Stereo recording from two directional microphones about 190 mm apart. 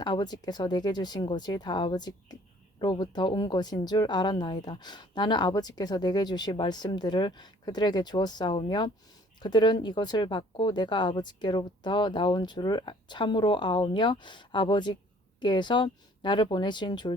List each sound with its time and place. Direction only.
0.0 s speech: 20° left (ahead or behind)